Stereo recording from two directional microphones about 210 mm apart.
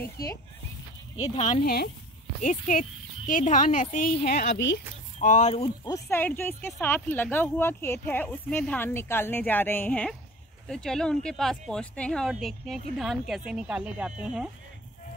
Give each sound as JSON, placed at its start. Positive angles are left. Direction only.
{"t": 1.3, "sound": "speech", "side_deg": 35}
{"t": 5.2, "sound": "speech", "side_deg": 35}
{"t": 6.0, "sound": "speech", "side_deg": 10}